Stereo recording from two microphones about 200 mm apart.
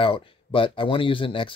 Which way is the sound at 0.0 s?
25° left (ahead or behind).